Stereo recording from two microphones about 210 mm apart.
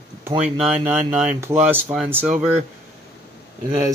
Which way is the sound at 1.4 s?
10° right (ahead or behind).